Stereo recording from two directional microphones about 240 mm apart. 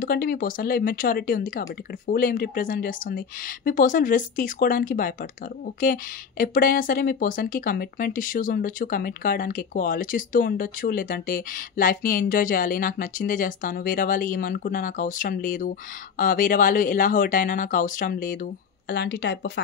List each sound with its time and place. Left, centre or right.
0.0 s speech: left